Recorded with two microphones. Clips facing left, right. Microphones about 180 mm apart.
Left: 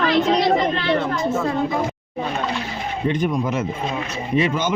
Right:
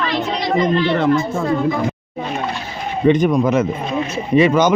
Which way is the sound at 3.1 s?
75° right (ahead or behind).